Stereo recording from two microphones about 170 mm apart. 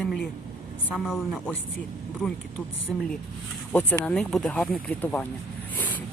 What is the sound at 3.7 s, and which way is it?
Speech, 10° left (ahead or behind).